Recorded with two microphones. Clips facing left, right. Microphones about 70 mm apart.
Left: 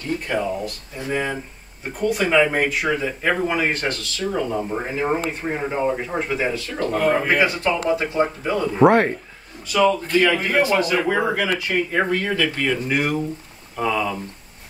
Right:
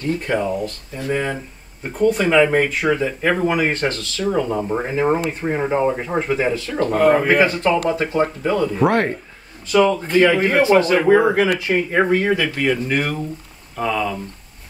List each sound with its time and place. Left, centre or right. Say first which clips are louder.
0.3 s a man's voice: right 2 dB; centre
1.1 s a man's voice: right 1 dB; centre
5.0 s a man's voice: right 3 dB; centre
7.3 s speech: right 4 dB; centre
8.7 s speech: left 6 dB; centre
9.8 s speech: right 2 dB; right
12.5 s speech: right 2 dB; centre